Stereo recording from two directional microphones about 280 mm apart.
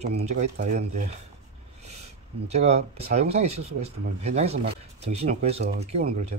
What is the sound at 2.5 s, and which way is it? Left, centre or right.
Speech, right.